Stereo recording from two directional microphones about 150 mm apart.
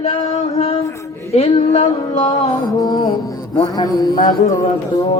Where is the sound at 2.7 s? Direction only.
25° left (ahead or behind).